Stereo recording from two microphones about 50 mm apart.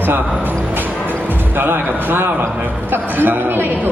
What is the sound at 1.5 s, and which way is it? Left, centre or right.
A man's voice, right.